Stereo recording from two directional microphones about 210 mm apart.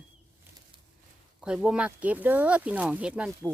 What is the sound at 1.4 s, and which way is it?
Speech, 5° right (ahead or behind).